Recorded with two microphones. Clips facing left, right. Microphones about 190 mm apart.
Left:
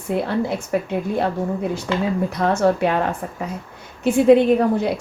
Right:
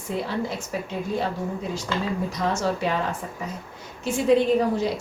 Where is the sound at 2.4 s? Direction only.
60° left (ahead or behind).